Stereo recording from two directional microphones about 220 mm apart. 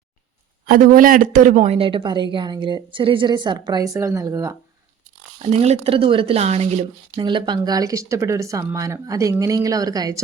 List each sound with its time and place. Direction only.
0.7 s speech: 40° right (ahead or behind); by 4.5 s 15° right (ahead or behind)
5.4 s speech: 30° right (ahead or behind)